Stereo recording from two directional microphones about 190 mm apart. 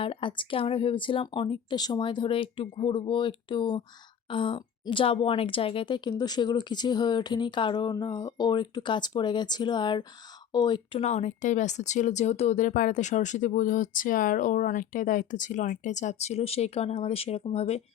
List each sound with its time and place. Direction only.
0.0 s a woman's voice: 30° left (ahead or behind)